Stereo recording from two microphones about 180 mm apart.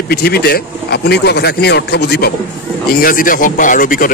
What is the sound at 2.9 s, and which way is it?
Speech, 50° left (ahead or behind).